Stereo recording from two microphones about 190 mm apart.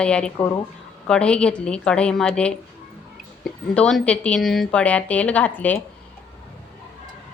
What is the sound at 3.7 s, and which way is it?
A woman's voice, 5° left (ahead or behind).